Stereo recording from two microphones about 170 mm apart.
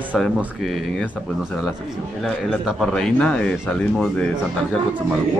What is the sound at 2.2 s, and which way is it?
Speech, centre (ahead or behind).